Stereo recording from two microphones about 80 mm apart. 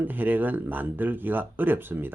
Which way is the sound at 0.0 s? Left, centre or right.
Right.